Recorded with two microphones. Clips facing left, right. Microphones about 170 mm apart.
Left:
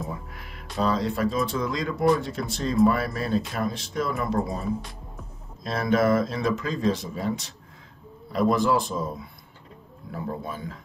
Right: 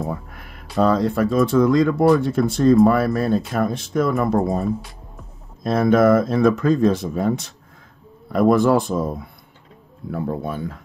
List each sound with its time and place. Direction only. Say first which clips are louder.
0.1 s a sound: right 6 dB; 50° right (ahead or behind)
0.7 s speech: right 7 dB; 55° right (ahead or behind)
5.6 s speech: right 7 dB; 50° right (ahead or behind)